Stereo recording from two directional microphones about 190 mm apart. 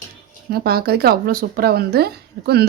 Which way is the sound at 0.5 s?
55° right (ahead or behind).